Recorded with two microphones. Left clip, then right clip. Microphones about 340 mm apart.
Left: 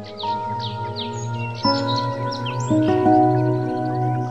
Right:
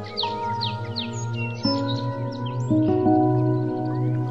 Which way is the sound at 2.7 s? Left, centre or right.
Left.